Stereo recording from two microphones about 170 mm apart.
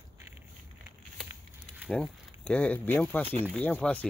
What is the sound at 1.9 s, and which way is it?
Speech, 5° left (ahead or behind).